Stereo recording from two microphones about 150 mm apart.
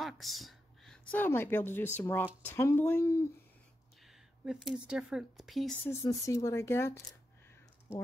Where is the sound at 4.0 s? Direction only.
Centre (ahead or behind).